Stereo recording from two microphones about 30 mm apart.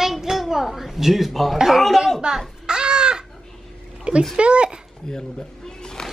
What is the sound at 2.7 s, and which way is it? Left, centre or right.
Chicken, right.